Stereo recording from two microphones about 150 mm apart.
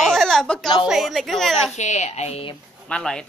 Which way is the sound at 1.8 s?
50° left (ahead or behind).